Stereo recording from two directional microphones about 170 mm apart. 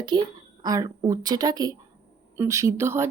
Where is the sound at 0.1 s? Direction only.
25° right (ahead or behind).